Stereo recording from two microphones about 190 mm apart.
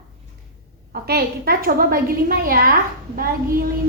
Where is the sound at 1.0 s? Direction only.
55° right (ahead or behind).